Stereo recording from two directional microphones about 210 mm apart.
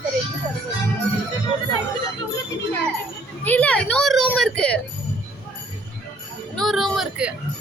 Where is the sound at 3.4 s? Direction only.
5° left (ahead or behind).